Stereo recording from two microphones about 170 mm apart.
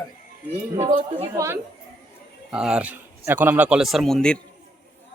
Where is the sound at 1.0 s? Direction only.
20° right (ahead or behind).